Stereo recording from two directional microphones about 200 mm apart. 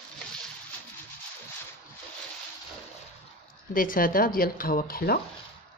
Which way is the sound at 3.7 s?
45° left (ahead or behind).